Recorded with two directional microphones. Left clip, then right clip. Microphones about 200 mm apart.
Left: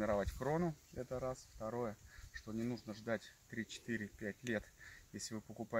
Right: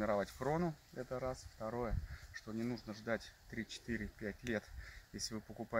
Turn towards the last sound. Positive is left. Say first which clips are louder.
# right 1 dB
turn(degrees=10)  # may be behind; listen again after turning